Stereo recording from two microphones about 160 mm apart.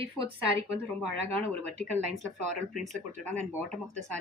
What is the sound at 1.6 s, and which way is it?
Speech, 45° right (ahead or behind).